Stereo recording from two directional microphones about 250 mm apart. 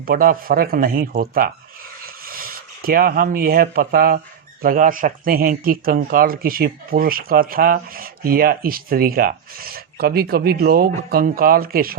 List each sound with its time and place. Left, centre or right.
0.0 s a man's voice: right
2.0 s a sound: right
4.6 s a man's voice: right